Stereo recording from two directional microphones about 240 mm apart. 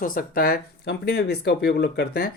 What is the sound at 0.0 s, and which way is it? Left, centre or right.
Speech, left.